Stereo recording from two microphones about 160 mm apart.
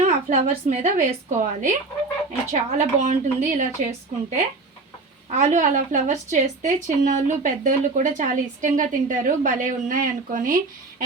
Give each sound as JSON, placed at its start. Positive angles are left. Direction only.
{"t": 0.0, "sound": "a woman's voice", "side_deg": -50}
{"t": 5.3, "sound": "a woman's voice", "side_deg": -50}